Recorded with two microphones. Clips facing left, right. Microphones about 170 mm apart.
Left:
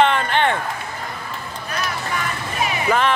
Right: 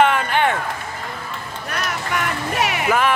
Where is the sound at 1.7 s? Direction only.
70° right (ahead or behind).